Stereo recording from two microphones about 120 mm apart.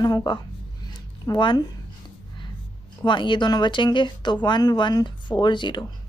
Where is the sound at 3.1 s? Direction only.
40° left (ahead or behind).